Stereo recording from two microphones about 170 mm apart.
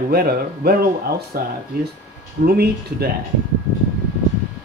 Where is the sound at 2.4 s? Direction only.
65° right (ahead or behind).